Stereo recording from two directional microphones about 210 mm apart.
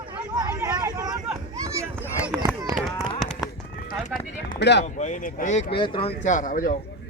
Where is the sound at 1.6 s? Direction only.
15° right (ahead or behind).